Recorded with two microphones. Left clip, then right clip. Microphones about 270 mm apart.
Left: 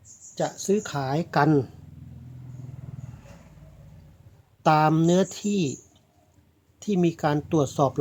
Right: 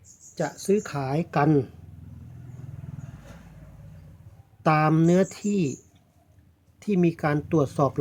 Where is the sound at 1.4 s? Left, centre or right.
Centre.